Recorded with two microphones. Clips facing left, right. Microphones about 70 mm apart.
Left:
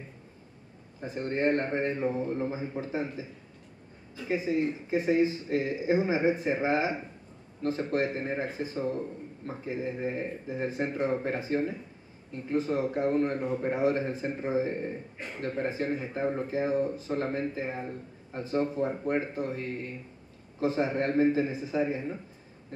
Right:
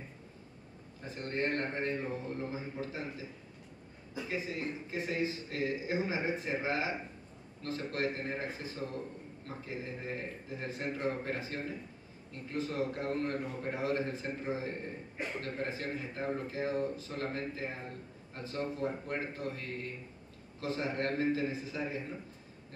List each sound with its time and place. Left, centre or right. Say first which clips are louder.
1.0 s speech: left 7 dB; left
4.3 s speech: left 10 dB; left
15.1 s a man's voice: right 1 dB; centre
15.4 s speech: left 12 dB; left